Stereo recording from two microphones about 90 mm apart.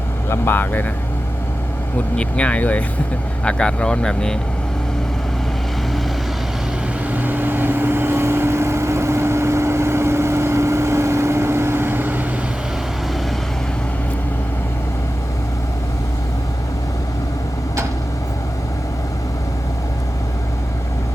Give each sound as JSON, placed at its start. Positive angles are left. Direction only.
{"t": 0.3, "sound": "speech", "side_deg": 25}
{"t": 2.1, "sound": "speech", "side_deg": 15}
{"t": 7.1, "sound": "vehicle", "side_deg": -20}